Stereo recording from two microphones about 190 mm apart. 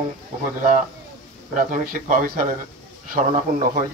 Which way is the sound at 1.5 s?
45° right (ahead or behind).